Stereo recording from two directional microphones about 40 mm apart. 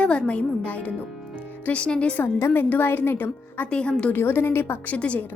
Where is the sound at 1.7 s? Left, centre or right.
Left.